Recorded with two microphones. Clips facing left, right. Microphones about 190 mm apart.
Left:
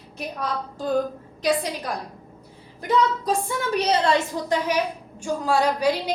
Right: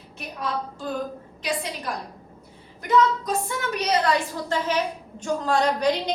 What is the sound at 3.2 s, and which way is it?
Speech, 30° left (ahead or behind).